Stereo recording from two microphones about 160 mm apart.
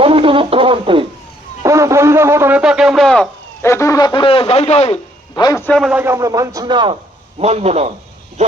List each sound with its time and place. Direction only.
0.0 s a sound: 35° right (ahead or behind)
1.6 s radio: 20° right (ahead or behind); by 3.2 s centre (ahead or behind)
3.6 s a man's voice: 15° left (ahead or behind); by 4.9 s 40° left (ahead or behind)
5.3 s a man's voice: 20° left (ahead or behind)
5.6 s a man's voice: 5° left (ahead or behind)
5.9 s speech: 15° right (ahead or behind)
7.3 s a man's voice: 40° right (ahead or behind)